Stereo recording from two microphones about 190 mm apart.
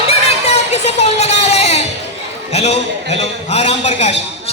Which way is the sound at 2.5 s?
35° left (ahead or behind).